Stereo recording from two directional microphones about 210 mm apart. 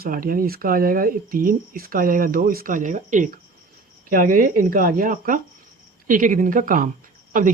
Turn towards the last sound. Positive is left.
turn(degrees=-40)  # may be behind; listen again after turning